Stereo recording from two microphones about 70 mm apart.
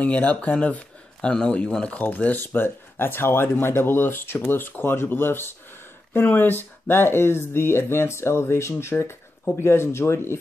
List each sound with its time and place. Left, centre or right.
0.0 s speech: centre
1.2 s a man's voice: centre; by 10.3 s left